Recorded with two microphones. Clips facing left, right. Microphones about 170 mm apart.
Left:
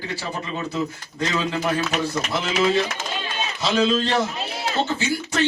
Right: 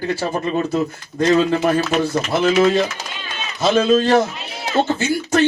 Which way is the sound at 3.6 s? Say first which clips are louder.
Right 6 dB; 50° right (ahead or behind).